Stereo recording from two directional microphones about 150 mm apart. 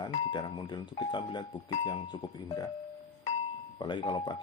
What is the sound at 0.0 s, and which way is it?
Speech, 30° left (ahead or behind).